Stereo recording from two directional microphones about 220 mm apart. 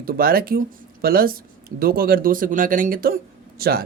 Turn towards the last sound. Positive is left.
turn(degrees=-45)  # may be behind; listen again after turning